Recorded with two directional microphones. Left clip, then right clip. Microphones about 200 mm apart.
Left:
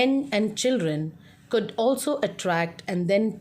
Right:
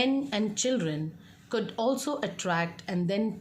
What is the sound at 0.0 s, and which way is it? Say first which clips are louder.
A woman's voice: left 5 dB; 30° left (ahead or behind).